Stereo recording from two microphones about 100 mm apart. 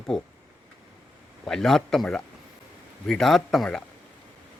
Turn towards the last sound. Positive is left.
turn(degrees=5)  # may be behind; listen again after turning